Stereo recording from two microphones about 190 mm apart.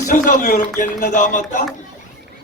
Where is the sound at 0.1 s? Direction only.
40° left (ahead or behind).